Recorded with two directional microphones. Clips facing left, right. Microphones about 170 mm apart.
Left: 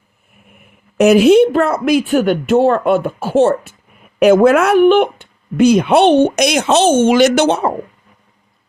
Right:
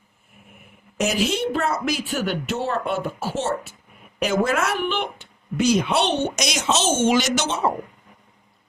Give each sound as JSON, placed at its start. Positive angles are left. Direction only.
{"t": 0.9, "sound": "speech", "side_deg": 60}